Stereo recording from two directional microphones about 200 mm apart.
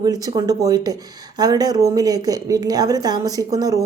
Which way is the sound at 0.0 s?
20° right (ahead or behind).